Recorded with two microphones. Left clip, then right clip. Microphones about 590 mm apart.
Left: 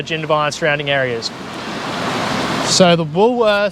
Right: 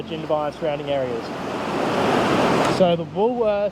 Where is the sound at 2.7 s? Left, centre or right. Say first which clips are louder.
Left 6 dB; left.